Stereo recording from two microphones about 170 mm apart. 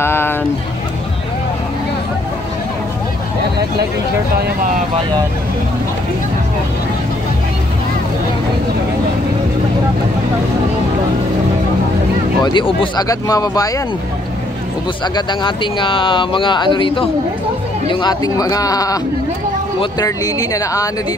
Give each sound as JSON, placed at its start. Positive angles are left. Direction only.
{"t": 0.0, "sound": "a sound", "side_deg": 15}
{"t": 12.5, "sound": "speech", "side_deg": 30}
{"t": 15.1, "sound": "speech", "side_deg": 30}